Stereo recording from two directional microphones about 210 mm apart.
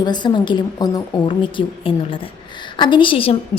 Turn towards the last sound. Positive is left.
turn(degrees=25)  # may be behind; listen again after turning